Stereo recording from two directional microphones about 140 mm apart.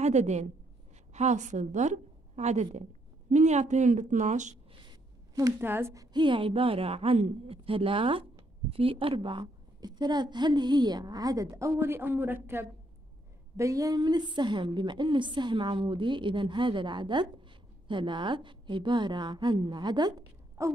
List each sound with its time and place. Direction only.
0.0 s a woman's voice: 55° right (ahead or behind)
4.8 s a sound: 25° right (ahead or behind)
6.1 s a woman's voice: 35° right (ahead or behind)